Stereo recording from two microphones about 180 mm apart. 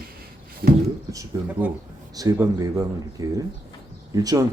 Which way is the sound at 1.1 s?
20° right (ahead or behind).